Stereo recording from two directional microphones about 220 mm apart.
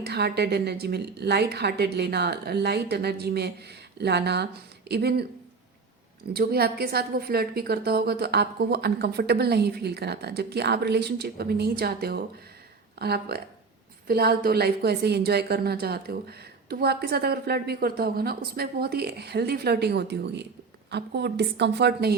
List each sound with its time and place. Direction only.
0.0 s a woman's voice: 45° right (ahead or behind)
6.3 s a woman's voice: 45° right (ahead or behind)